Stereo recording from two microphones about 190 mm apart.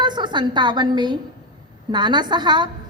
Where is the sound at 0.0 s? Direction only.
25° right (ahead or behind).